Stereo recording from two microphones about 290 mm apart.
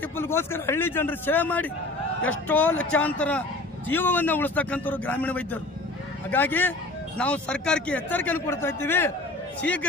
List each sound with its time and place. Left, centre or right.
0.2 s a man's voice: centre